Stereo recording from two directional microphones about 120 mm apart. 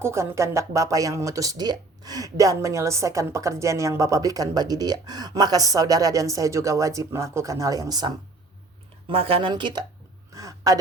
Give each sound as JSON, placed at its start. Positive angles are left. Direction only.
{"t": 0.0, "sound": "speech", "side_deg": -20}
{"t": 9.0, "sound": "speech", "side_deg": -50}
{"t": 9.5, "sound": "speech", "side_deg": -40}
{"t": 10.3, "sound": "speech", "side_deg": -30}